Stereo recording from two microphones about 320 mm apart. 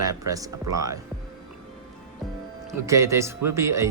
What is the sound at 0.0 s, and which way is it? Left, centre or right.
Speech, centre.